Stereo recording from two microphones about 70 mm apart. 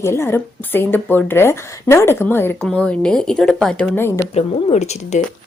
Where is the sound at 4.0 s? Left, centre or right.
Left.